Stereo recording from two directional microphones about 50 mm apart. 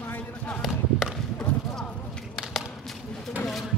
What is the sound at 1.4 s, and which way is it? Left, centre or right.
Speech, centre.